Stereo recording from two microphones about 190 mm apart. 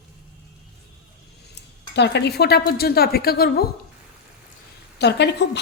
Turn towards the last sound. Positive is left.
turn(degrees=65)  # may be behind; listen again after turning